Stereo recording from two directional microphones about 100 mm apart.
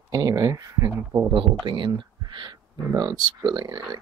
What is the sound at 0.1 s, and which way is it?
Speech, 40° right (ahead or behind).